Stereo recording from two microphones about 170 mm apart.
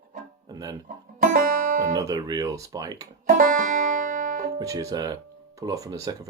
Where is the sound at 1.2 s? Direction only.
55° right (ahead or behind).